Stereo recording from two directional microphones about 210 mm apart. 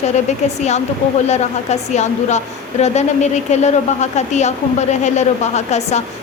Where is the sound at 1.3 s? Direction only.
30° left (ahead or behind).